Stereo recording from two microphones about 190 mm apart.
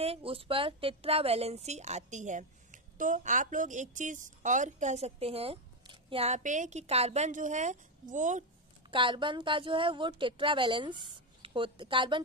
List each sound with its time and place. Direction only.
0.0 s a woman's voice: 30° right (ahead or behind)
8.9 s a woman's voice: 25° right (ahead or behind)